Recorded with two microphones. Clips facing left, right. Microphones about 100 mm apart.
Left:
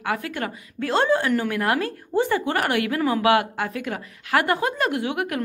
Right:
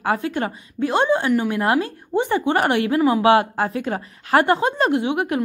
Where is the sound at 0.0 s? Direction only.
30° right (ahead or behind).